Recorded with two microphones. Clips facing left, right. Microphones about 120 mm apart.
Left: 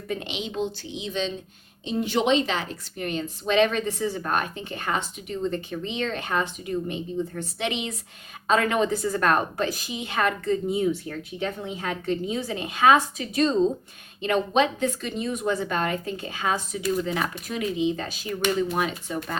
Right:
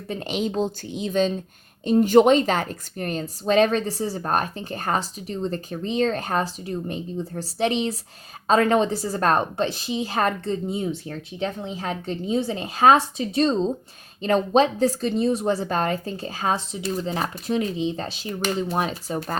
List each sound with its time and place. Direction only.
0.1 s a woman's voice: 40° right (ahead or behind)